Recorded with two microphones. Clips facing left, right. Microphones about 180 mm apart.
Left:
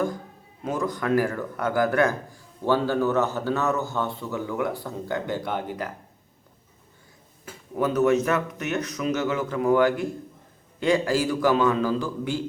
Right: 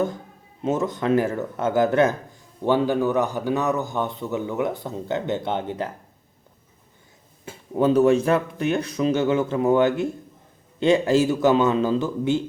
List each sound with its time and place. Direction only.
0.6 s speech: 25° right (ahead or behind)
7.4 s speech: 25° right (ahead or behind)